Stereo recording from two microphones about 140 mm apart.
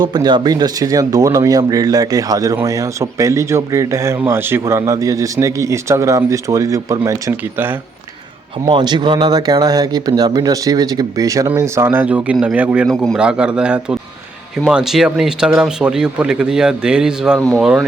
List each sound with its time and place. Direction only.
0.0 s speech: 30° right (ahead or behind)
8.6 s speech: 30° right (ahead or behind); by 12.9 s 10° right (ahead or behind)
12.9 s speech: 5° left (ahead or behind)
13.1 s a man's voice: 5° right (ahead or behind)